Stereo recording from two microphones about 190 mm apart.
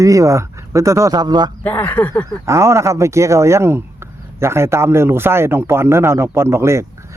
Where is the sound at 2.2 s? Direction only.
15° right (ahead or behind).